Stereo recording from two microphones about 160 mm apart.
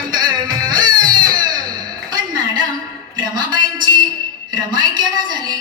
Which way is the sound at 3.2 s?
25° right (ahead or behind).